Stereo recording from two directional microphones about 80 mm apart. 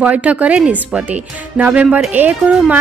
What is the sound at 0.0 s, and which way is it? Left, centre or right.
A woman's voice, centre.